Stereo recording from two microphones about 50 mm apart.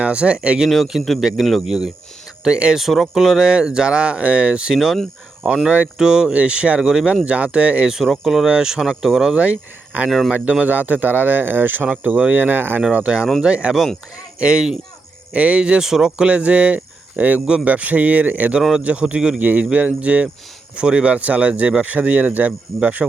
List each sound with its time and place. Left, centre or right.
0.0 s speech: right
0.7 s speech: centre
2.4 s speech: centre
2.7 s speech: centre
5.6 s speech: right
6.0 s speech: centre
7.9 s speech: centre
9.3 s speech: right
10.1 s speech: centre
10.7 s speech: right
12.9 s speech: right
15.8 s speech: centre; by 23.0 s right